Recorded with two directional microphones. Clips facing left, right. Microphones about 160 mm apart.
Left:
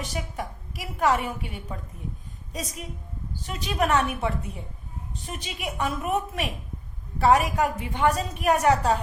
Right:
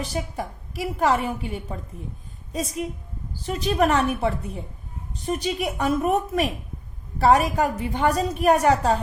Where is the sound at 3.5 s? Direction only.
40° right (ahead or behind).